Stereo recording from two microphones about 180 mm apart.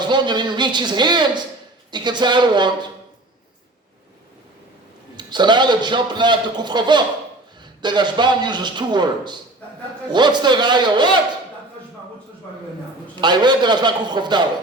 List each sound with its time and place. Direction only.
0.0 s a man's voice: 25° right (ahead or behind)
5.1 s a man's voice: 25° right (ahead or behind)
13.2 s a man's voice: 25° right (ahead or behind)